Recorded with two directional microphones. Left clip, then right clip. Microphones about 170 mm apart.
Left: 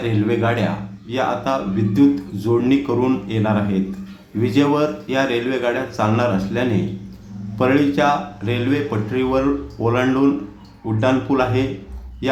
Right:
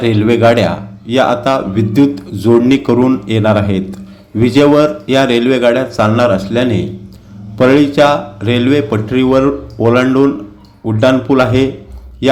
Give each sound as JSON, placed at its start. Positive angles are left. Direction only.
{"t": 0.0, "sound": "a man's voice", "side_deg": -35}